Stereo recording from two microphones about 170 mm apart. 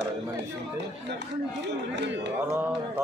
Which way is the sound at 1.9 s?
90° right.